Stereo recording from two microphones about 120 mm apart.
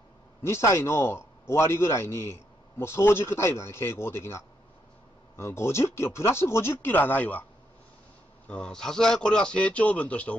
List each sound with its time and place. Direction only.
0.4 s a man's voice: 20° left (ahead or behind)
8.5 s speech: 5° left (ahead or behind)